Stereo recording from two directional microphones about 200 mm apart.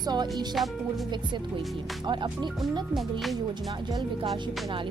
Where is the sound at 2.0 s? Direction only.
25° right (ahead or behind).